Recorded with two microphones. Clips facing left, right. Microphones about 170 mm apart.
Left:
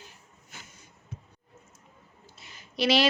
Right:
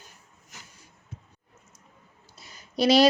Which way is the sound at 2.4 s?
40° right (ahead or behind).